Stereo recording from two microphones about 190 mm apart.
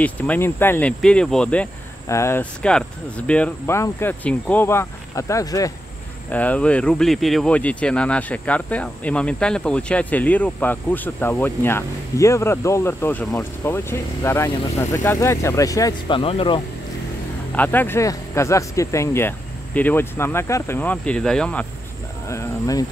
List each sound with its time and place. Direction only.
0.0 s speech: 10° left (ahead or behind)
6.3 s speech: 5° left (ahead or behind); by 16.6 s 30° left (ahead or behind)
17.6 s speech: 10° left (ahead or behind)
22.3 s speech: 15° left (ahead or behind)